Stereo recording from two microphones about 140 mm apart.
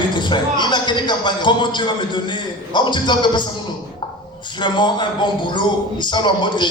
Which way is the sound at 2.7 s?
30° left (ahead or behind).